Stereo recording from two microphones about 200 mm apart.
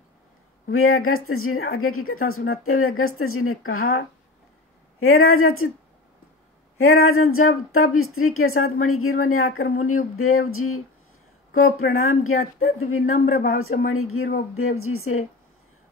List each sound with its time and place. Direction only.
0.7 s a woman's voice: 90° left
5.0 s a woman's voice: 90° left
6.8 s a woman's voice: 90° left
13.1 s speech: 35° left (ahead or behind)
13.6 s a woman's voice: 90° left